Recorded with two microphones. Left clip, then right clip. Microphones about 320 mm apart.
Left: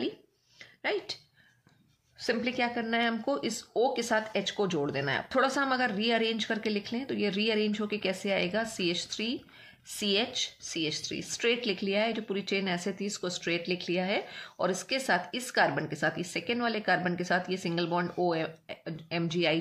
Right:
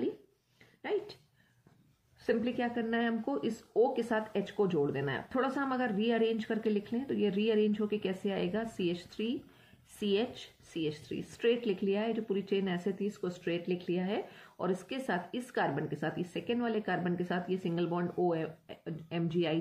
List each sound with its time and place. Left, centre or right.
2.2 s speech: centre